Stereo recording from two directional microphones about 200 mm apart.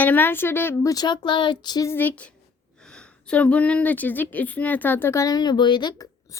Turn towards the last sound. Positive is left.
turn(degrees=20)  # may be behind; listen again after turning